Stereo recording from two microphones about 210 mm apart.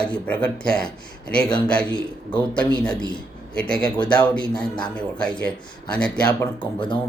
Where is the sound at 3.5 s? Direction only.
5° left (ahead or behind).